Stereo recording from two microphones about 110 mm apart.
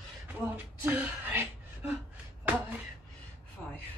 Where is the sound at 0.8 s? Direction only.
15° right (ahead or behind).